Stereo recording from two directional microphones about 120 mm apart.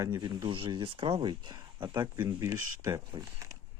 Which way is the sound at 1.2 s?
40° right (ahead or behind).